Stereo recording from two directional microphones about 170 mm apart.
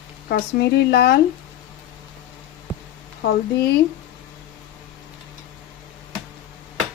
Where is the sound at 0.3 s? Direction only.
60° left (ahead or behind).